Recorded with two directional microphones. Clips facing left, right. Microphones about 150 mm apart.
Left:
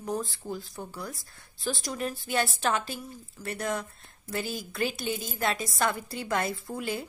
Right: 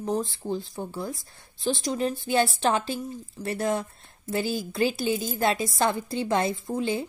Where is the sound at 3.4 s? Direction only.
30° right (ahead or behind).